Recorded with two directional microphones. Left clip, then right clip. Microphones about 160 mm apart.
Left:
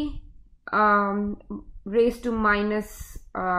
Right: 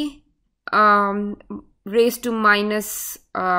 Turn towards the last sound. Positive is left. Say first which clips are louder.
# right 6 dB
turn(degrees=-20)  # may be behind; listen again after turning